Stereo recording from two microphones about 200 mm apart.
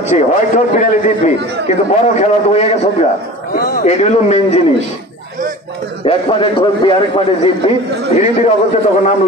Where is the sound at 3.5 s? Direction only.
45° left (ahead or behind).